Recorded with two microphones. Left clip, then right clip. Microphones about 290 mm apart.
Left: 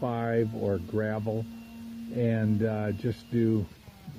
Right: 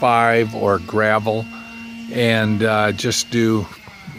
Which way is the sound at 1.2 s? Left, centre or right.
Right.